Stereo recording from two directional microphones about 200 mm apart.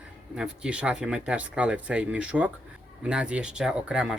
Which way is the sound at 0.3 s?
5° right (ahead or behind).